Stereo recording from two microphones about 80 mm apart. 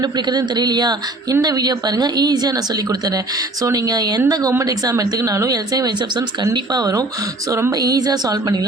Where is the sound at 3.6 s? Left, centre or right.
Right.